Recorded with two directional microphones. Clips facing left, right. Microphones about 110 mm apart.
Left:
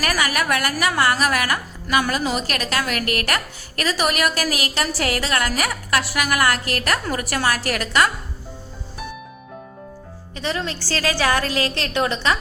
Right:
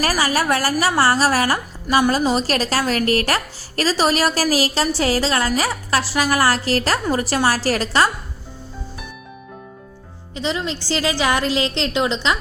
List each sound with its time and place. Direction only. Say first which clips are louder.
0.0 s a woman's voice: right 3 dB; 30° right (ahead or behind)
10.3 s a woman's voice: right 2 dB; 20° right (ahead or behind)